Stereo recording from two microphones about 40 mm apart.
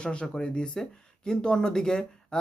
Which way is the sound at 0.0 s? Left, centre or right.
Left.